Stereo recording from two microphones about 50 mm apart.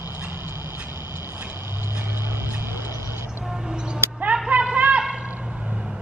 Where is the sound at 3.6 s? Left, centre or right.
Centre.